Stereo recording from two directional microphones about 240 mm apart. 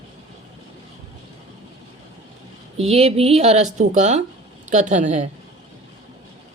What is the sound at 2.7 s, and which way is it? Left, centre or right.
A woman's voice, right.